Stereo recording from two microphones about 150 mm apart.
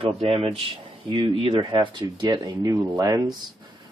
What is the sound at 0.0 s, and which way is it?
Speech, 40° right (ahead or behind).